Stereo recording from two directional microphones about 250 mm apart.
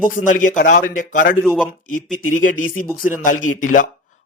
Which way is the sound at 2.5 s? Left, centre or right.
Left.